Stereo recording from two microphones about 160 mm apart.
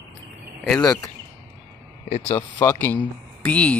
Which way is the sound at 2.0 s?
40° left (ahead or behind).